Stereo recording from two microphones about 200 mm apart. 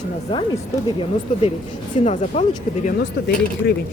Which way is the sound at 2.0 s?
35° left (ahead or behind).